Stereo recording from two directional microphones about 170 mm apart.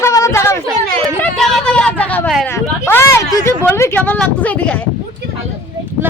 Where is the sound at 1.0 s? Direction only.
Centre (ahead or behind).